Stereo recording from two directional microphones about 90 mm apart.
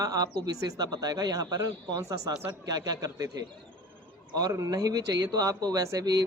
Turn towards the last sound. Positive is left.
turn(degrees=-45)  # may be behind; listen again after turning